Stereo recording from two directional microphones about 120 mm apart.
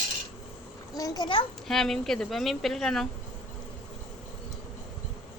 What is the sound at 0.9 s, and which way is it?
Speech, 30° left (ahead or behind).